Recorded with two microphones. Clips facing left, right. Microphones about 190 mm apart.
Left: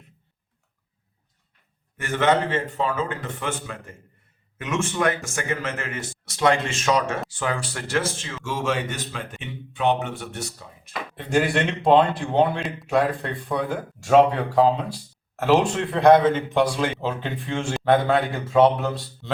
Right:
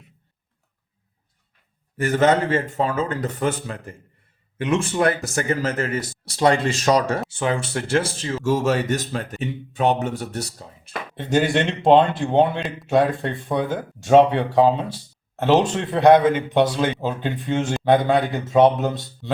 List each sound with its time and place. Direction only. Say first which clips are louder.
2.0 s speech: right 3 dB; 40° right (ahead or behind)
7.3 s speech: right 4 dB; 25° right (ahead or behind)
11.2 s a man's voice: right 2 dB; 20° right (ahead or behind)
12.5 s speech: right 2 dB; centre (ahead or behind)
13.2 s a man's voice: right 3 dB; 20° right (ahead or behind)